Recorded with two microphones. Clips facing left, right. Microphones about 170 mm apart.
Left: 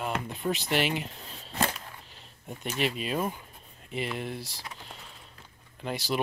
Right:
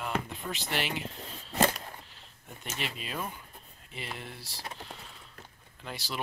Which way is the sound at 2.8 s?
20° left (ahead or behind).